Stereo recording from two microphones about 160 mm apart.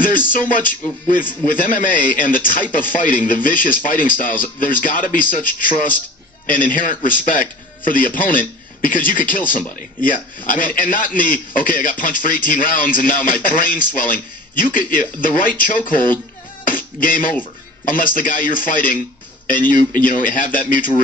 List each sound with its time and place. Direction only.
0.3 s speech: 60° left (ahead or behind)
16.6 s a sound: 60° left (ahead or behind)
17.8 s speech: 60° left (ahead or behind)